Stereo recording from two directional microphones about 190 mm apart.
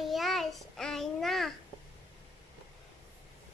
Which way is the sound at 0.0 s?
Centre (ahead or behind).